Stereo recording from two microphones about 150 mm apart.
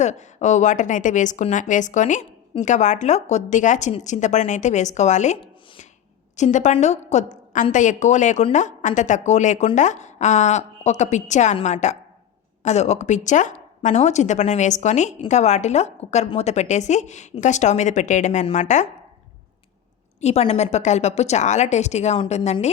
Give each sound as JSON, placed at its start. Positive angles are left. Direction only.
{"t": 0.0, "sound": "a woman's voice", "side_deg": 50}
{"t": 18.4, "sound": "a woman's voice", "side_deg": 40}
{"t": 20.2, "sound": "speech", "side_deg": 45}